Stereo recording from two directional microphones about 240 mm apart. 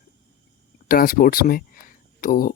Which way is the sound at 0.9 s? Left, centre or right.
Left.